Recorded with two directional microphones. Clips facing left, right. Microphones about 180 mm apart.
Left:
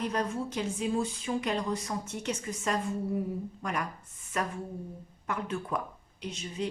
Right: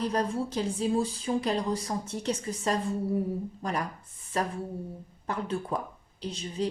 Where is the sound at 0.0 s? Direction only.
35° right (ahead or behind).